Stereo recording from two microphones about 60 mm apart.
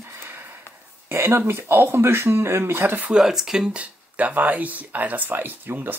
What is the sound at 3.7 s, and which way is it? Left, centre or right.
Speech, right.